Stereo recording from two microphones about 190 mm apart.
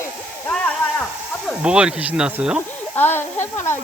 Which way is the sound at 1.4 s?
5° right (ahead or behind).